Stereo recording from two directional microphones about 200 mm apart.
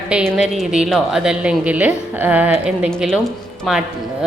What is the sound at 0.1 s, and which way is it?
Speech, 5° right (ahead or behind).